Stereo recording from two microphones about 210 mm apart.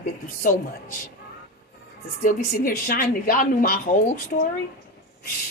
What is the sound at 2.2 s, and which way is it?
A woman's voice, 45° left (ahead or behind).